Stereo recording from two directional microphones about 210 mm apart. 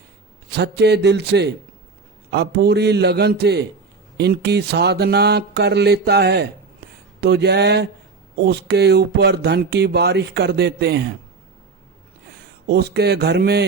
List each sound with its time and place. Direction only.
0.5 s speech: 50° right (ahead or behind)
12.6 s speech: 50° right (ahead or behind)